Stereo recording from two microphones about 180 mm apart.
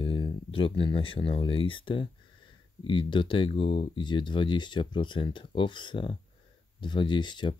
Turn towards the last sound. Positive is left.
turn(degrees=25)  # may be behind; listen again after turning